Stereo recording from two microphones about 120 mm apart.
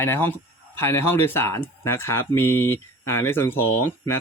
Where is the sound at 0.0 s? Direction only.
20° left (ahead or behind).